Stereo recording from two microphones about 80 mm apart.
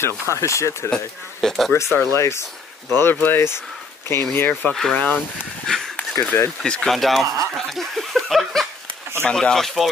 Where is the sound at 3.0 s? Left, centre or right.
Left.